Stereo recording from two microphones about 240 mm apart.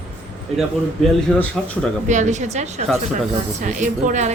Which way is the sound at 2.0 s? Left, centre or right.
Right.